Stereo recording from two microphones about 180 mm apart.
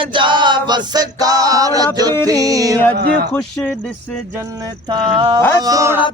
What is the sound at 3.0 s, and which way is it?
Speech, 65° right (ahead or behind).